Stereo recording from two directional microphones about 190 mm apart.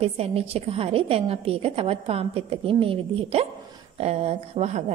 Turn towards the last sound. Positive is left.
turn(degrees=-35)  # may be behind; listen again after turning